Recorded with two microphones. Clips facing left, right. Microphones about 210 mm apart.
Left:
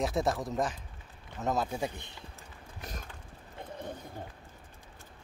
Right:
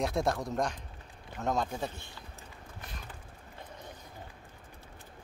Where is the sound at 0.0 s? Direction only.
Centre (ahead or behind).